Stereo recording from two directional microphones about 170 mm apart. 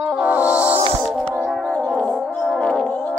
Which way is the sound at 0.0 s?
5° right (ahead or behind).